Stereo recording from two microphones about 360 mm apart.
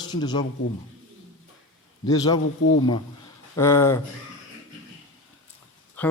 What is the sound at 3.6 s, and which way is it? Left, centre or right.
Speech, centre.